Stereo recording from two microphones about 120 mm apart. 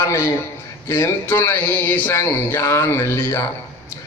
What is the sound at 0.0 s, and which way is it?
Speech, 25° left (ahead or behind).